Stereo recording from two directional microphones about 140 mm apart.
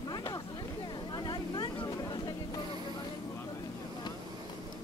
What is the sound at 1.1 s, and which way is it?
Vehicle, 30° left (ahead or behind).